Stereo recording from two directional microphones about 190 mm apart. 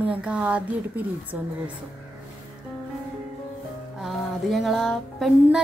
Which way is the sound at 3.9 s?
Centre (ahead or behind).